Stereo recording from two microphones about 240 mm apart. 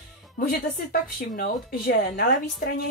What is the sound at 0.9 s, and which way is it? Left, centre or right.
A woman's voice, left.